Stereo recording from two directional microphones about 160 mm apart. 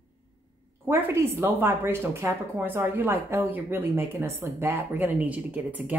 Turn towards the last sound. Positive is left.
turn(degrees=-10)  # may be behind; listen again after turning